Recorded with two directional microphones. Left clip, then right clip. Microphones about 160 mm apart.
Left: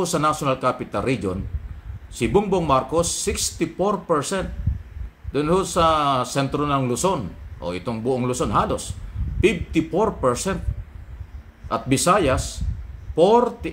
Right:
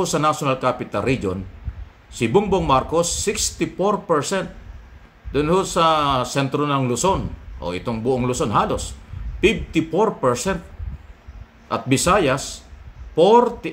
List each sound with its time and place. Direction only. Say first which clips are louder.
0.0 s speech: right 2 dB; 10° right (ahead or behind)
11.7 s speech: right 1 dB; 10° right (ahead or behind)